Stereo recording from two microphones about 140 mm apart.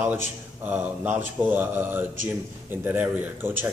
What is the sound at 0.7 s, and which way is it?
A man's voice, 10° right (ahead or behind).